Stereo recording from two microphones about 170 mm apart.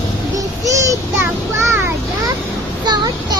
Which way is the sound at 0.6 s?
20° right (ahead or behind).